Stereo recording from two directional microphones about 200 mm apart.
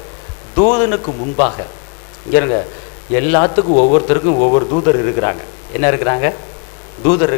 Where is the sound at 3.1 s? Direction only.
15° left (ahead or behind).